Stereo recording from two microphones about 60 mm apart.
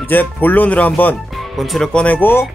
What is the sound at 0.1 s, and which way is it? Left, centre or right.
Speech, left.